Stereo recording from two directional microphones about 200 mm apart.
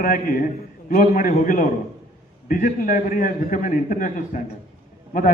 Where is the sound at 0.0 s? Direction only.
45° left (ahead or behind).